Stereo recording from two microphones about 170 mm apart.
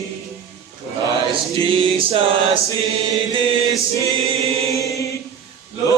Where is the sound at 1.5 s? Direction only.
30° right (ahead or behind).